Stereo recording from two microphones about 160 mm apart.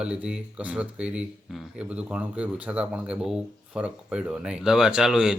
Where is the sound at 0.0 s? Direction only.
5° right (ahead or behind).